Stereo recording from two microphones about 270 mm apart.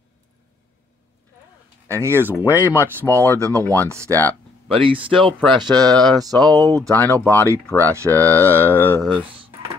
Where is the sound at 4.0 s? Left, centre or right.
Centre.